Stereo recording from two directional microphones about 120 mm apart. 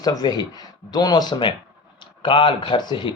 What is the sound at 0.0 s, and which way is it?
Speech, 35° left (ahead or behind).